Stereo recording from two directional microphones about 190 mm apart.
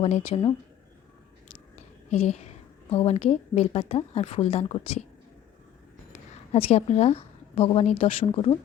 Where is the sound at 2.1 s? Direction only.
35° left (ahead or behind).